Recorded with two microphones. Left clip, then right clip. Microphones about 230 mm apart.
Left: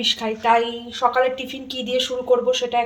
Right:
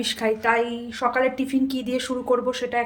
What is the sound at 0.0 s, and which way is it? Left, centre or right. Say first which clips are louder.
A woman's voice: left 2 dB; centre.